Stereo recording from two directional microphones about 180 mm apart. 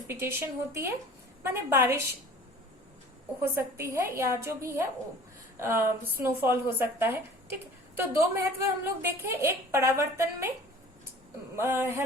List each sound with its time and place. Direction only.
0.1 s a woman's voice: 15° right (ahead or behind)
3.4 s a woman's voice: 15° right (ahead or behind)
11.5 s a woman's voice: 15° right (ahead or behind)